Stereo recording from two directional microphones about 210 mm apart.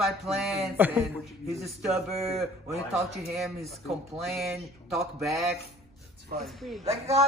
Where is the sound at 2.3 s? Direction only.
Centre (ahead or behind).